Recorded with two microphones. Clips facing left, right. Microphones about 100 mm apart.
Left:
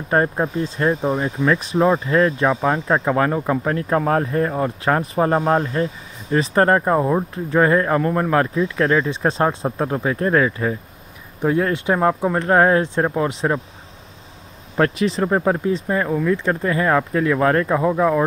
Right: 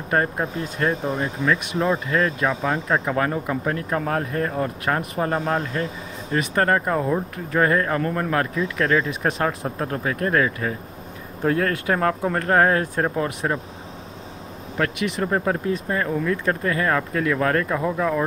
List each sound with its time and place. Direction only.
0.1 s speech: 25° left (ahead or behind)
14.8 s speech: 30° left (ahead or behind)